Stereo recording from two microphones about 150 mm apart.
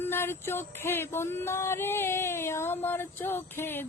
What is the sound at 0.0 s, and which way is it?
Speech, 15° left (ahead or behind).